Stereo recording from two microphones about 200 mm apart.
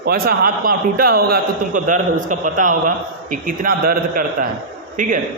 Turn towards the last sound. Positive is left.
turn(degrees=-40)  # may be behind; listen again after turning